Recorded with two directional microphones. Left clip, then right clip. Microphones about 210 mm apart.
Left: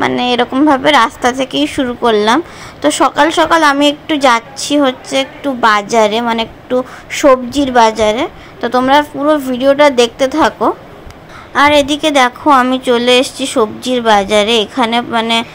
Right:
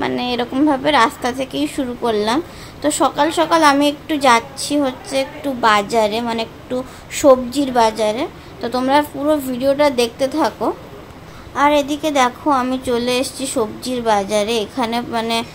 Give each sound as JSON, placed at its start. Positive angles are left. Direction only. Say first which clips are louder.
{"t": 0.0, "sound": "a woman's voice", "louder": "left 8 dB", "side_deg": 20}